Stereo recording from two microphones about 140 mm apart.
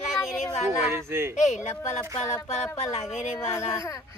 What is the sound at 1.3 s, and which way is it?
Speech, 55° left (ahead or behind).